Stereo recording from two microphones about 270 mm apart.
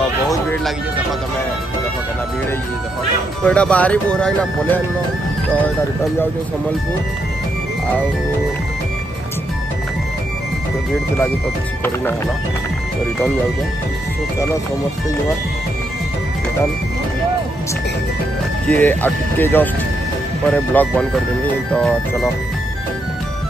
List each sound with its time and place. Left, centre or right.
0.0 s music: centre
3.4 s speech: centre
11.8 s speech: centre
18.7 s speech: centre